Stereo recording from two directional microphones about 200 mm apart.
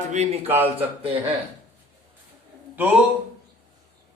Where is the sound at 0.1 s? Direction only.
35° right (ahead or behind).